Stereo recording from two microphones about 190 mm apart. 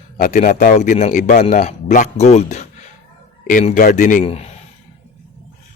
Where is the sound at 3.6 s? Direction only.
45° left (ahead or behind).